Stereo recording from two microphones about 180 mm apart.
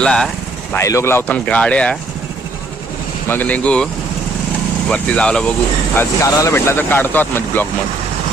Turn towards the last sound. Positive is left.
turn(degrees=10)  # may be behind; listen again after turning